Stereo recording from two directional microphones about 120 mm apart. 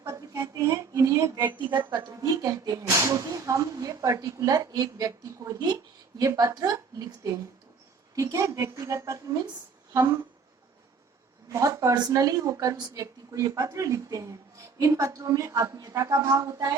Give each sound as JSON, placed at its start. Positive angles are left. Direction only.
{"t": 0.0, "sound": "a sound", "side_deg": -30}
{"t": 1.9, "sound": "a woman's voice", "side_deg": -35}
{"t": 11.5, "sound": "a woman's voice", "side_deg": -30}